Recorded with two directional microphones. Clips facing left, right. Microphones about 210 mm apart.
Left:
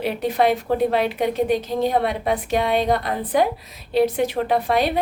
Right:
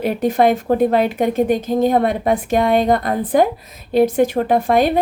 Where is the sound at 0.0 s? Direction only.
45° right (ahead or behind).